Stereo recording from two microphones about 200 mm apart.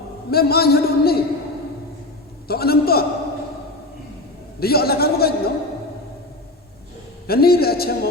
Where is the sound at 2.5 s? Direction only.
50° left (ahead or behind).